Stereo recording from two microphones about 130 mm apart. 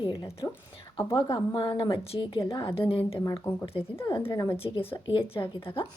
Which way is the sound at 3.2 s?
30° left (ahead or behind).